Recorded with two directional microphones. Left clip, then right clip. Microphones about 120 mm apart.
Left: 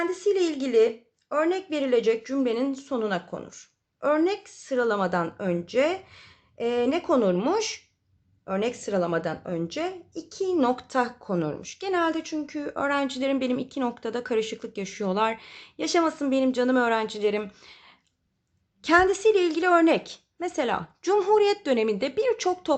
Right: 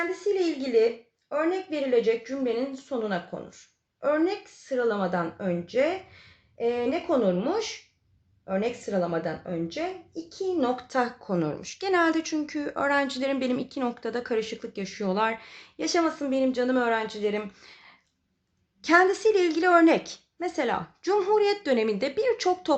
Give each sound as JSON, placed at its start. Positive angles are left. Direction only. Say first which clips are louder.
{"t": 0.1, "sound": "speech", "louder": "left 2 dB", "side_deg": 50}
{"t": 10.8, "sound": "speech", "louder": "left 1 dB", "side_deg": 30}